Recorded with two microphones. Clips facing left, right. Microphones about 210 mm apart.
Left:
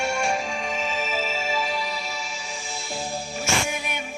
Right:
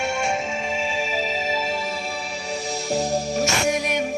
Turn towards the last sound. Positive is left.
turn(degrees=-40)  # may be behind; listen again after turning